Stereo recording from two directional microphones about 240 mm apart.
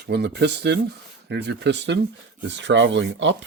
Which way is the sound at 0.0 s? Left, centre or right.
Right.